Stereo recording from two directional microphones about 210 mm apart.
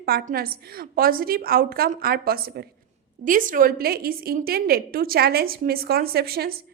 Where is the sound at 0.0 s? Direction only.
45° right (ahead or behind).